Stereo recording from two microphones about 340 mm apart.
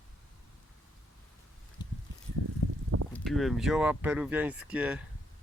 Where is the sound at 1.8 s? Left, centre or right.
Centre.